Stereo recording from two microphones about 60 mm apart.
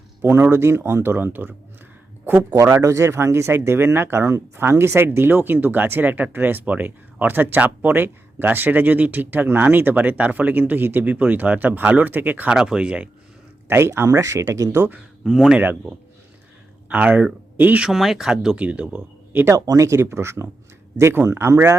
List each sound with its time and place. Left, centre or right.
0.2 s speech: right
2.8 s speech: right
12.5 s speech: centre
13.7 s speech: right
14.1 s speech: right
15.2 s speech: centre
16.9 s speech: right
17.8 s speech: centre
18.5 s speech: right
19.5 s speech: right
20.0 s speech: right
21.5 s speech: right